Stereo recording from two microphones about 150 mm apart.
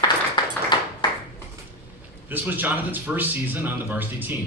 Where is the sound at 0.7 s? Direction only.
30° left (ahead or behind).